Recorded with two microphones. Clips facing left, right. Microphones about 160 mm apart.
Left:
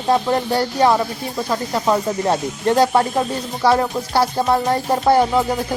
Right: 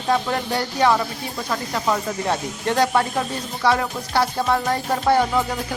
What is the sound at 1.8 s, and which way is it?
Music, 35° left (ahead or behind).